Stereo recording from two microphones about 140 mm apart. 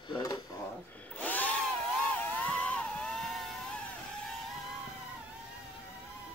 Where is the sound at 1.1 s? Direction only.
10° left (ahead or behind).